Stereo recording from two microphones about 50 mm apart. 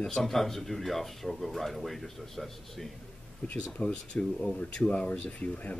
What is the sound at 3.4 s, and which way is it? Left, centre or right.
Speech, left.